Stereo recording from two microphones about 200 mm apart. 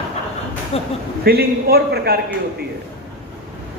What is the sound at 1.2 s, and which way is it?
Speech, 50° right (ahead or behind).